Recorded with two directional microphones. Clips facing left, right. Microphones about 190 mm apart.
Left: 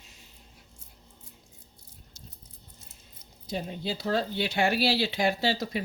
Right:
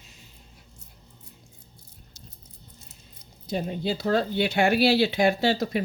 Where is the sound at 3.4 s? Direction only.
55° right (ahead or behind).